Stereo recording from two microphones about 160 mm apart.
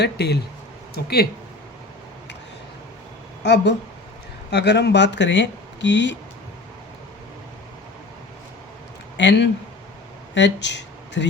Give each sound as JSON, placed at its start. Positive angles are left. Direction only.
{"t": 0.0, "sound": "speech", "side_deg": 90}
{"t": 0.9, "sound": "speech", "side_deg": 75}
{"t": 3.4, "sound": "speech", "side_deg": 90}
{"t": 9.1, "sound": "speech", "side_deg": 90}